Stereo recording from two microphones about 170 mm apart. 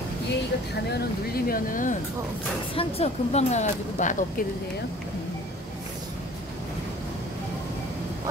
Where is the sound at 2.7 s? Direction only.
35° left (ahead or behind).